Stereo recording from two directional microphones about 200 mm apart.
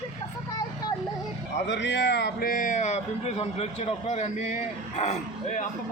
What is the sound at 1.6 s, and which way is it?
A man's voice, 60° left (ahead or behind).